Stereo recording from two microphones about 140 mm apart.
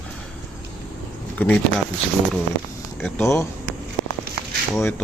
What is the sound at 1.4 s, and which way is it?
Speech, 10° left (ahead or behind).